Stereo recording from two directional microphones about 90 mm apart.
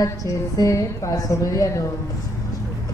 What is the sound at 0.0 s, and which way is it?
Speech, 40° left (ahead or behind).